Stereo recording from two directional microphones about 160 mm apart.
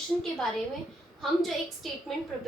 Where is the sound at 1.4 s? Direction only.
Centre (ahead or behind).